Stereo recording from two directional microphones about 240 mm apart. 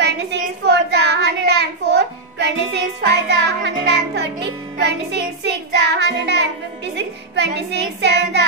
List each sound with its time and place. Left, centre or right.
0.0 s child singing: right
4.7 s music: right
7.0 s speech: right